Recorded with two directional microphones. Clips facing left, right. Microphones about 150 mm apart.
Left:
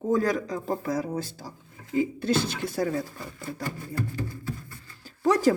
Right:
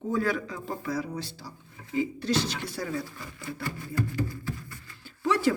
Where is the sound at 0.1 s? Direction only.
40° left (ahead or behind).